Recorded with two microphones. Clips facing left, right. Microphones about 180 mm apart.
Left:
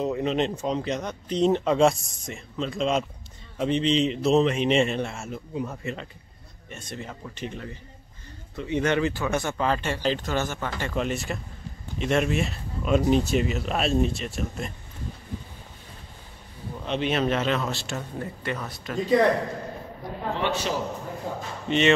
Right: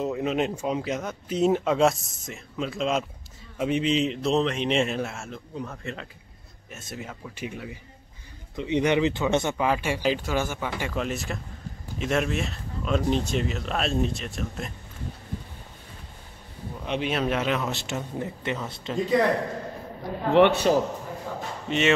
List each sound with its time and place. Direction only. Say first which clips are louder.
0.0 s a man's voice: left 1 dB; 5° right (ahead or behind)
10.9 s a man's voice: left 2 dB; centre (ahead or behind)
16.8 s speech: left 2 dB; 10° right (ahead or behind); by 18.9 s 25° right (ahead or behind)
20.3 s a man's voice: right 11 dB; 60° right (ahead or behind)
21.3 s a sound: left 2 dB; 25° left (ahead or behind)
21.6 s a man's voice: left 2 dB; 5° right (ahead or behind)